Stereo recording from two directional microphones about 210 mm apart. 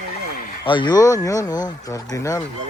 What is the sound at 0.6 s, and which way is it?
Speech, 20° left (ahead or behind).